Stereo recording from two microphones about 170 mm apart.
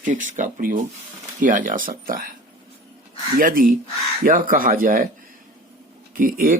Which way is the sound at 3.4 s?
55° right (ahead or behind).